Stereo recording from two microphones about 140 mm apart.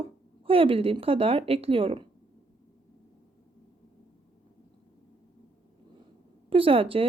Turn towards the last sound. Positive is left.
turn(degrees=-40)  # may be behind; listen again after turning